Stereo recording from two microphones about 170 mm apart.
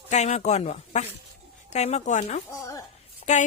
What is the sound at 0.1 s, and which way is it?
Speech, 40° left (ahead or behind).